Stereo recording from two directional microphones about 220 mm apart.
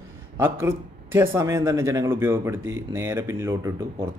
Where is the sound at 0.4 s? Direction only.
10° right (ahead or behind).